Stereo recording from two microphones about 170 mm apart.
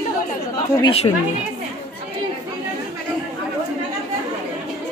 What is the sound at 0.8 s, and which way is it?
Speech, 35° left (ahead or behind).